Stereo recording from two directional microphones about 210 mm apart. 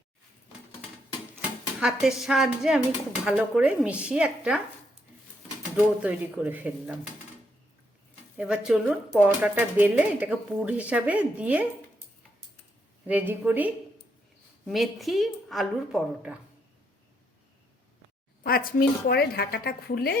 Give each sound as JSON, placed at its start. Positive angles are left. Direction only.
{"t": 1.4, "sound": "a woman's voice", "side_deg": -5}
{"t": 5.7, "sound": "speech", "side_deg": -5}
{"t": 8.4, "sound": "speech", "side_deg": -5}
{"t": 13.1, "sound": "speech", "side_deg": -10}
{"t": 14.7, "sound": "a woman's voice", "side_deg": 0}
{"t": 18.4, "sound": "a woman's voice", "side_deg": 45}